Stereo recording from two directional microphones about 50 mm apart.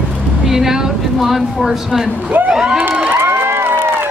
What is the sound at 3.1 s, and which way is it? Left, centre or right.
Crowd, right.